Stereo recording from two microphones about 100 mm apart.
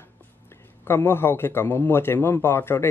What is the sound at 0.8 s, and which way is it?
A man's voice, 25° left (ahead or behind).